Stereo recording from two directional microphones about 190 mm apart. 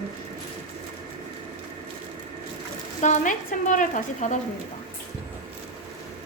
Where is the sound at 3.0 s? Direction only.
40° left (ahead or behind).